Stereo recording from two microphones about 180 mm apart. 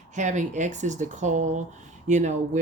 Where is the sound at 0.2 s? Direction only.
40° right (ahead or behind).